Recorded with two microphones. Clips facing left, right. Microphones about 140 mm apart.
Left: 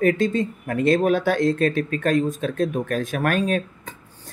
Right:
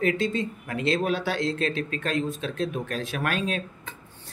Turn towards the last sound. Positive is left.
turn(degrees=45)  # may be behind; listen again after turning